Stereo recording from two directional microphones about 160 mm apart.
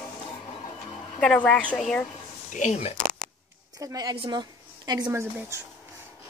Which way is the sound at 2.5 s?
45° left (ahead or behind).